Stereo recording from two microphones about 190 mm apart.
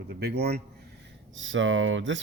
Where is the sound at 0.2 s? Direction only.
55° right (ahead or behind).